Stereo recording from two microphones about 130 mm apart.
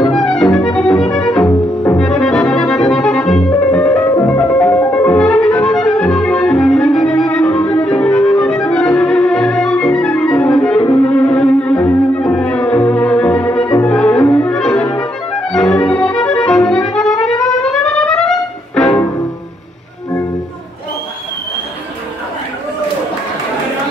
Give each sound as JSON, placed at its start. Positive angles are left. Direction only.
{"t": 0.0, "sound": "music", "side_deg": 5}
{"t": 1.4, "sound": "music", "side_deg": 20}
{"t": 2.0, "sound": "brass instrument", "side_deg": 5}
{"t": 4.0, "sound": "music", "side_deg": 20}
{"t": 12.2, "sound": "brass instrument", "side_deg": 10}
{"t": 13.8, "sound": "music", "side_deg": 5}